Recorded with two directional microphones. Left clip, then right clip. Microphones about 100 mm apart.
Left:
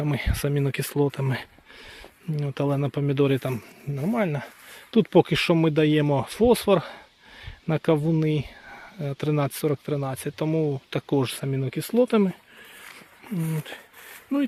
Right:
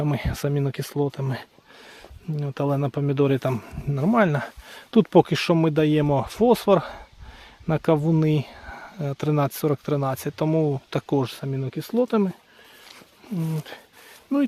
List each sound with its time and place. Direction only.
0.1 s speech: 10° right (ahead or behind)
0.5 s speech: 5° left (ahead or behind)
2.6 s speech: 10° right (ahead or behind)
3.9 s speech: 60° right (ahead or behind)
4.9 s speech: 35° right (ahead or behind)
5.3 s speech: 5° right (ahead or behind)
8.1 s speech: 30° right (ahead or behind)
9.7 s speech: 35° right (ahead or behind)
11.3 s speech: 15° left (ahead or behind)
13.3 s speech: 5° right (ahead or behind)